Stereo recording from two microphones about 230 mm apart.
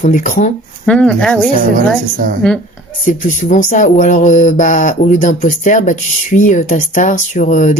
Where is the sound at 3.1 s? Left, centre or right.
Left.